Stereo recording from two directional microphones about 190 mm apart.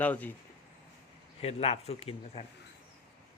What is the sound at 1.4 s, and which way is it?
Speech, 30° left (ahead or behind).